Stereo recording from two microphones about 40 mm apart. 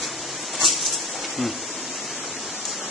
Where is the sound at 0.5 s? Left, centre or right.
Centre.